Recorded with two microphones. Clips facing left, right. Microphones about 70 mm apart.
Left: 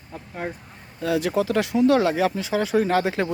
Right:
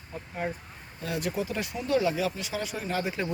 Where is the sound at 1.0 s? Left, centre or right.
Left.